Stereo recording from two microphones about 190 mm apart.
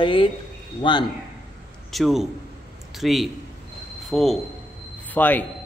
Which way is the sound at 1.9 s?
Centre (ahead or behind).